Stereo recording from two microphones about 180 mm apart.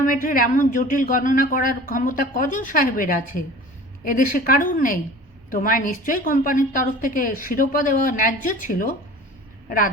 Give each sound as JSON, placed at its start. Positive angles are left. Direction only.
{"t": 0.0, "sound": "a woman's voice", "side_deg": 50}